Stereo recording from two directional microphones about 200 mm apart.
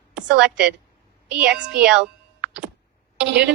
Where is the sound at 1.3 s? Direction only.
5° right (ahead or behind).